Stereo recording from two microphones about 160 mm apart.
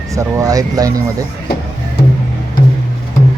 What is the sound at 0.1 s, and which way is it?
Speech, 20° right (ahead or behind).